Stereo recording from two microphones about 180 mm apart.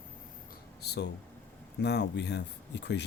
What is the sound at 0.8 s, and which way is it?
Speech, 65° left (ahead or behind).